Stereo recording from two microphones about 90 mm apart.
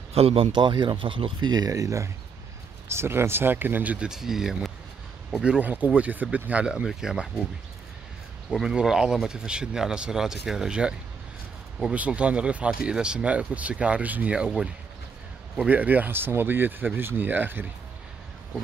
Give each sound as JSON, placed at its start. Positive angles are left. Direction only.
{"t": 0.2, "sound": "speech", "side_deg": -90}
{"t": 0.5, "sound": "speech", "side_deg": -55}
{"t": 4.1, "sound": "speech", "side_deg": -5}
{"t": 5.4, "sound": "speech", "side_deg": -15}
{"t": 8.5, "sound": "speech", "side_deg": -10}